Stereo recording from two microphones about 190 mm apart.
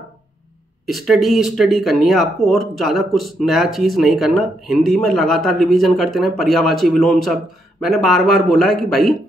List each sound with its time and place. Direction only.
0.8 s speech: centre (ahead or behind)